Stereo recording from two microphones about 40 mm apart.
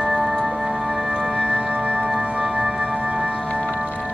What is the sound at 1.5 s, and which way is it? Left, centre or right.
Music, right.